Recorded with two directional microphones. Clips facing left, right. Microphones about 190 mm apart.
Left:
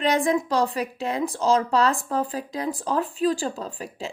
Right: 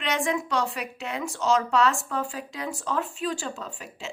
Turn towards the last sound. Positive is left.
turn(degrees=35)  # may be behind; listen again after turning